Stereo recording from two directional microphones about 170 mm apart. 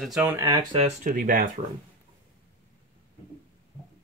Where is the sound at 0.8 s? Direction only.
50° right (ahead or behind).